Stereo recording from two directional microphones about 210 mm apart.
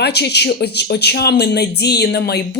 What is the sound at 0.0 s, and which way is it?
Speech, 50° left (ahead or behind).